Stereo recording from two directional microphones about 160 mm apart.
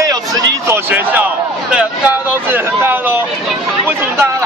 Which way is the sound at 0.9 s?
10° right (ahead or behind).